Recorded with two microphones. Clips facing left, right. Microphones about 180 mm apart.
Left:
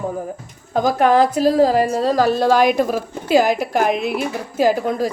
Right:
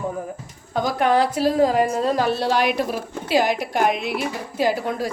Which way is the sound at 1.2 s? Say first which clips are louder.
Left 4 dB; 40° left (ahead or behind).